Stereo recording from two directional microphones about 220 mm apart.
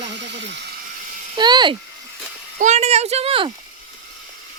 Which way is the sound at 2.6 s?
30° right (ahead or behind).